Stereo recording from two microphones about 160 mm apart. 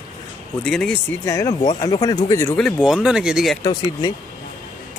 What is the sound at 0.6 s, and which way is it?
Speech, 5° left (ahead or behind).